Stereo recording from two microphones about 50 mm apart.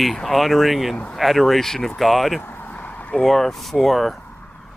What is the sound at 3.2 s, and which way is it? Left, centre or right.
Speech, centre.